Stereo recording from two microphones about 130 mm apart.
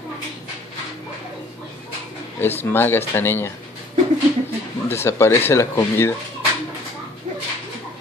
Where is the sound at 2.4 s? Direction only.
15° left (ahead or behind).